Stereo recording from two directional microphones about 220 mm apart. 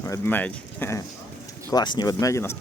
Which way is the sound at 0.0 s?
10° left (ahead or behind).